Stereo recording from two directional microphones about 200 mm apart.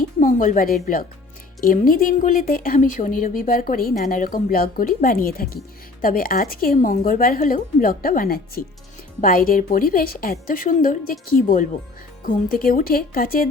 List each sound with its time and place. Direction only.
0.2 s a woman's voice: 40° left (ahead or behind)